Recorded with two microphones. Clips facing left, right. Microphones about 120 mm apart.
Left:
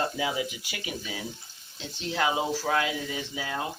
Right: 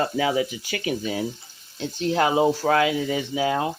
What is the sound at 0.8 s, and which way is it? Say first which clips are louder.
Speech: right 10 dB; 55° right (ahead or behind).